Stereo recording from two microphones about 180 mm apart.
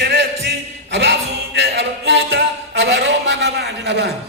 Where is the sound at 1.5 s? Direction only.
70° right (ahead or behind).